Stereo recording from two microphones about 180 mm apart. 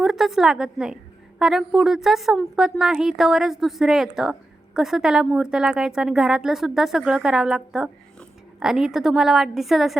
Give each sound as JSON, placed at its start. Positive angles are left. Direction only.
{"t": 0.0, "sound": "a woman's voice", "side_deg": 0}